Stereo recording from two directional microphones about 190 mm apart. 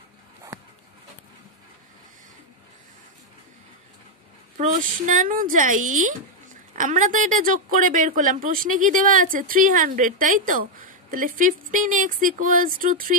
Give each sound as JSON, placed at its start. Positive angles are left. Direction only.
{"t": 4.6, "sound": "speech", "side_deg": -40}